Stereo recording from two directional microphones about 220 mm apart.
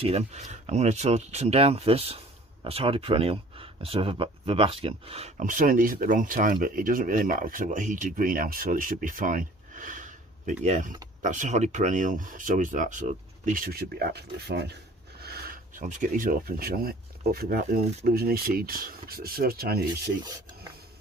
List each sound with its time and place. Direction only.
0.0 s speech: 30° right (ahead or behind); by 19.8 s 45° right (ahead or behind)